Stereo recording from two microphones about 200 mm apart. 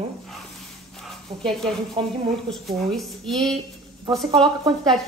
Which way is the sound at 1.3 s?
30° right (ahead or behind).